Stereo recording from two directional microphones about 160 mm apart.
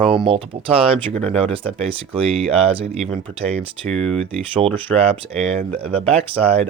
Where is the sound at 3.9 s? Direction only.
5° left (ahead or behind).